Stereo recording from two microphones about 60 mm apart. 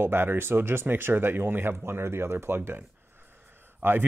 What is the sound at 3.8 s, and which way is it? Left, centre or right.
Speech, right.